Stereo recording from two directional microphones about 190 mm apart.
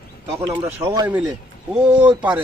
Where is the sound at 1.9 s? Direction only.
10° right (ahead or behind).